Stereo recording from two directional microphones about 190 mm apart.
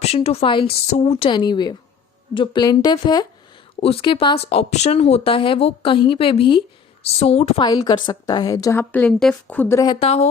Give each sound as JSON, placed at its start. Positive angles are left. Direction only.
{"t": 0.0, "sound": "a woman's voice", "side_deg": 35}
{"t": 10.0, "sound": "a woman's voice", "side_deg": 35}